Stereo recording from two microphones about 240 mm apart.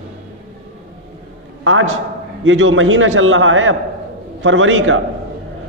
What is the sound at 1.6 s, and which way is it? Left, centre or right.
A man's voice, right.